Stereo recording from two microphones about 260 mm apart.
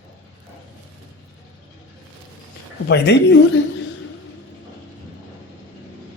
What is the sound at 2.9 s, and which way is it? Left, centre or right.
Speech, left.